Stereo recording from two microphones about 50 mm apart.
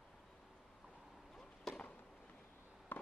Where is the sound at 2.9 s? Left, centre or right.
Left.